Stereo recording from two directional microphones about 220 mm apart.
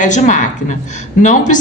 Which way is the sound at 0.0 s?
35° left (ahead or behind).